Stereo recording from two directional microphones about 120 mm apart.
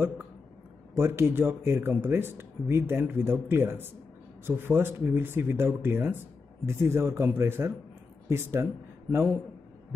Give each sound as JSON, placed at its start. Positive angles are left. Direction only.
{"t": 0.9, "sound": "speech", "side_deg": -20}